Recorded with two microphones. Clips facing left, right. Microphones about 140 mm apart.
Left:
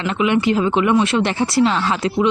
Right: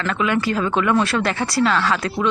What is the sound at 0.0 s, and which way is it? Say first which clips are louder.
Speech: left 3 dB; 20° left (ahead or behind).